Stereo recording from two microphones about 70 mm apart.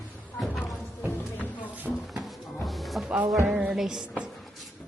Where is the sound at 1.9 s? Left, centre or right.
Centre.